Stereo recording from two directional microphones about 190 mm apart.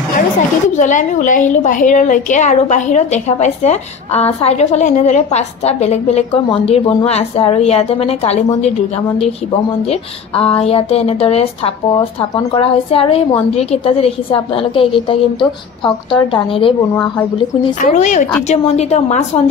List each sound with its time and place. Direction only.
0.7 s a woman's voice: 40° left (ahead or behind)
17.7 s a woman's voice: 40° left (ahead or behind)